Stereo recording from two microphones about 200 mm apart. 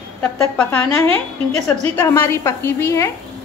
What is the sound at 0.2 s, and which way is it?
Speech, 5° left (ahead or behind).